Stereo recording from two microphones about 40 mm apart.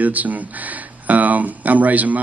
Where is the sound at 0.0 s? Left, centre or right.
Right.